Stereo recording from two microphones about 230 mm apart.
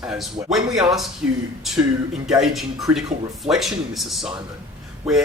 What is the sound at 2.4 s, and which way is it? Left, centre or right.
Speech, centre.